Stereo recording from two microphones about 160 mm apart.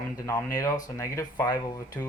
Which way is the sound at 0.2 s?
20° left (ahead or behind).